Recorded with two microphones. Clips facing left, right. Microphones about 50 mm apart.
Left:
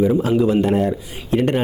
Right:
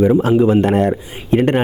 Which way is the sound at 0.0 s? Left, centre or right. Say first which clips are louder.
Right 4 dB; right.